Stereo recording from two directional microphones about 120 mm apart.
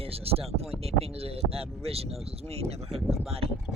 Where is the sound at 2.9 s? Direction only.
Centre (ahead or behind).